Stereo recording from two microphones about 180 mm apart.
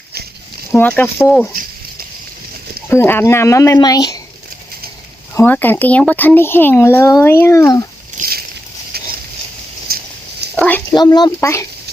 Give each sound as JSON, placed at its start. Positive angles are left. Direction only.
{"t": 0.7, "sound": "speech", "side_deg": 10}
{"t": 2.9, "sound": "speech", "side_deg": 10}
{"t": 5.3, "sound": "speech", "side_deg": 10}
{"t": 8.2, "sound": "vehicle", "side_deg": -55}
{"t": 8.9, "sound": "a sound", "side_deg": -60}
{"t": 10.5, "sound": "a sound", "side_deg": 5}
{"t": 10.9, "sound": "speech", "side_deg": 25}